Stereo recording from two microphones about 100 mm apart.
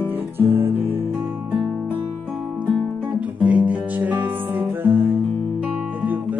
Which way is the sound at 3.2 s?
15° right (ahead or behind).